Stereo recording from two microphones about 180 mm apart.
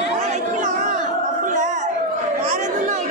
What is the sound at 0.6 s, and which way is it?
Battle cry, 45° right (ahead or behind).